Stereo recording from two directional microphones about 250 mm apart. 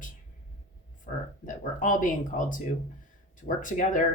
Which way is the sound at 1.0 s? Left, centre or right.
Left.